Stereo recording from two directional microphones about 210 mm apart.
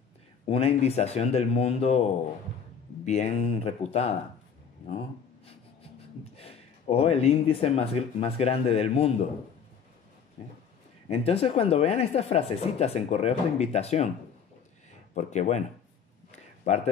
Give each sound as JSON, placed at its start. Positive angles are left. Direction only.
{"t": 0.5, "sound": "speech", "side_deg": 30}
{"t": 6.3, "sound": "speech", "side_deg": 30}
{"t": 11.1, "sound": "speech", "side_deg": 30}
{"t": 15.1, "sound": "speech", "side_deg": 35}
{"t": 16.3, "sound": "a sound", "side_deg": 35}